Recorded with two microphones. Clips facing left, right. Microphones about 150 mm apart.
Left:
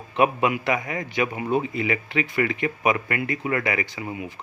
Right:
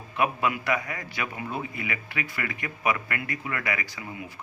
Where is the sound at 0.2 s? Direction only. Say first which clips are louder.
Left 5 dB; 20° left (ahead or behind).